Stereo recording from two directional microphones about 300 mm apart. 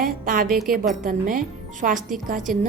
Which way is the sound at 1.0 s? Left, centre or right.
Right.